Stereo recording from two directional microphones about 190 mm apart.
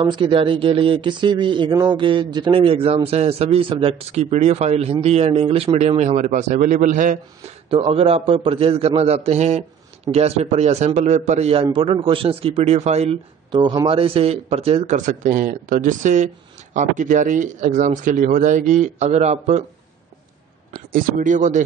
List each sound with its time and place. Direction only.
0.0 s a man's voice: 25° right (ahead or behind); by 7.2 s 45° right (ahead or behind)
7.7 s a man's voice: 30° right (ahead or behind)
20.7 s a man's voice: 45° right (ahead or behind)